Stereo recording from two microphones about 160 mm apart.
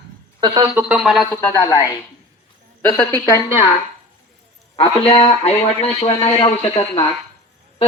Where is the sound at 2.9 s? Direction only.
20° left (ahead or behind).